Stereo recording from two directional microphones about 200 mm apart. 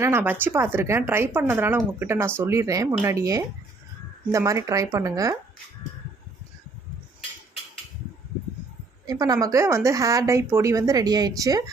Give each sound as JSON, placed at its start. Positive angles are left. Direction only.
{"t": 0.0, "sound": "a woman's voice", "side_deg": -10}
{"t": 9.0, "sound": "a woman's voice", "side_deg": -20}